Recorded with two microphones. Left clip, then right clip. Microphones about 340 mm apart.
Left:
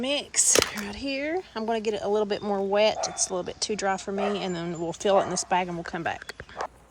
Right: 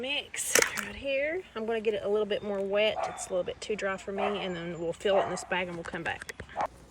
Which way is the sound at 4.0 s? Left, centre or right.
Left.